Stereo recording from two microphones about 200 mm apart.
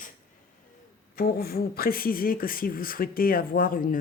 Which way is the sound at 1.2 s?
50° left (ahead or behind).